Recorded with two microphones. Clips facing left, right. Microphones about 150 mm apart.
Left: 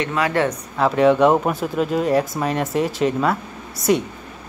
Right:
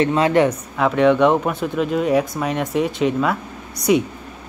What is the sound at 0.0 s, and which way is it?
Speech, 25° right (ahead or behind).